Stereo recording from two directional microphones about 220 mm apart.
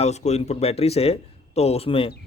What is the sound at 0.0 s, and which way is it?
Speech, 30° left (ahead or behind).